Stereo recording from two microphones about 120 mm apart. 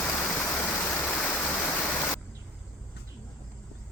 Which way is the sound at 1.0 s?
15° left (ahead or behind).